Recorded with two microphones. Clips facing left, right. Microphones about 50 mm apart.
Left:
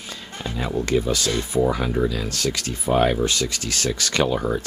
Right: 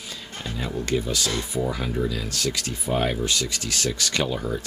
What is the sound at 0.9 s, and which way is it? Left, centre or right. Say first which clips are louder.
Speech: left 3 dB; left.